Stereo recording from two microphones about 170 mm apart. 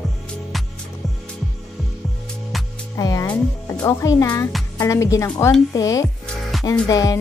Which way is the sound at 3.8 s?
20° left (ahead or behind).